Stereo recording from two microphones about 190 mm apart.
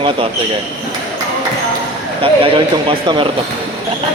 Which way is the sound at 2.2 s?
30° right (ahead or behind).